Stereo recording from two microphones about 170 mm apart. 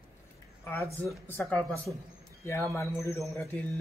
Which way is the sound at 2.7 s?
15° left (ahead or behind).